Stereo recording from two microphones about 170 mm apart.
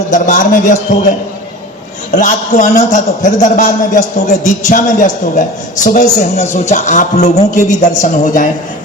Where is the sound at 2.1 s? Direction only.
50° left (ahead or behind).